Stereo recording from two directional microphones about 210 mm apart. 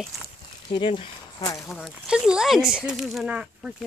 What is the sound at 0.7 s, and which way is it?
Speech, 25° left (ahead or behind).